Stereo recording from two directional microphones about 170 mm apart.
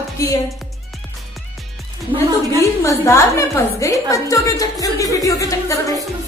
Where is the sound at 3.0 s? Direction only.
15° left (ahead or behind).